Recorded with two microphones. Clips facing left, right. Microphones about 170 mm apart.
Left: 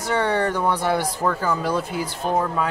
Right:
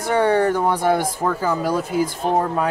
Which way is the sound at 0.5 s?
50° right (ahead or behind).